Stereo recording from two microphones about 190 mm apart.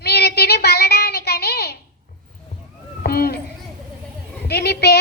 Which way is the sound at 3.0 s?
55° left (ahead or behind).